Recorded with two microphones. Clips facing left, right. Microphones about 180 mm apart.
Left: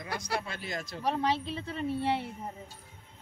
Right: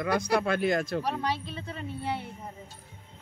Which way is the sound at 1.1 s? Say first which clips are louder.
Left 2 dB; 25° left (ahead or behind).